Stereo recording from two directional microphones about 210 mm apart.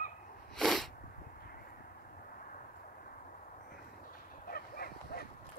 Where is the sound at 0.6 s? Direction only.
Centre (ahead or behind).